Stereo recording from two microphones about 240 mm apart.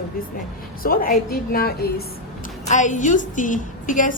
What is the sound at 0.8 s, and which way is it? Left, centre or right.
A woman's voice, left.